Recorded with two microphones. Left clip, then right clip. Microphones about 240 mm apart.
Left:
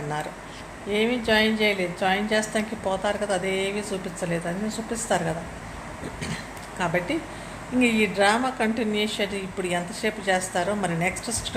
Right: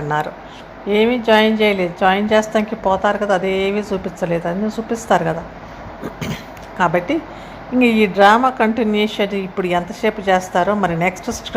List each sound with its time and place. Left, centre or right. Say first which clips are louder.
0.9 s a woman's voice: right 9 dB; right